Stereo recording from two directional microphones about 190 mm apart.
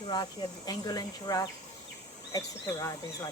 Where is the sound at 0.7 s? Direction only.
20° left (ahead or behind).